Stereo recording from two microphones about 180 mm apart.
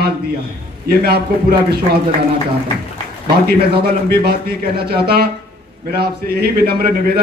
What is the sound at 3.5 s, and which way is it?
A man's voice, 60° right (ahead or behind).